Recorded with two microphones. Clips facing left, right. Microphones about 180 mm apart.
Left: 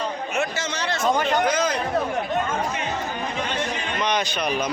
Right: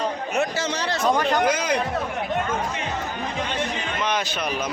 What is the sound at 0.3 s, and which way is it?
Speech, 35° right (ahead or behind).